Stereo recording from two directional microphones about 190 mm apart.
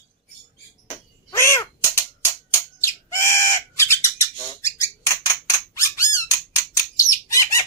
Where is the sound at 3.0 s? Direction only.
15° left (ahead or behind).